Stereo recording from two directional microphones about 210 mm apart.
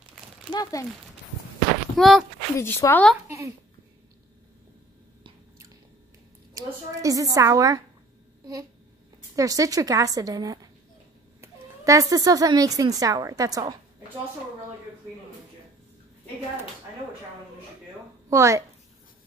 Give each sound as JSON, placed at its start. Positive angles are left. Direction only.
{"t": 0.5, "sound": "speech", "side_deg": 15}
{"t": 2.0, "sound": "speech", "side_deg": 0}
{"t": 2.5, "sound": "speech", "side_deg": 10}
{"t": 3.3, "sound": "a woman's voice", "side_deg": -15}
{"t": 6.5, "sound": "a woman's voice", "side_deg": -15}
{"t": 9.3, "sound": "a woman's voice", "side_deg": -15}
{"t": 18.3, "sound": "a woman's voice", "side_deg": -15}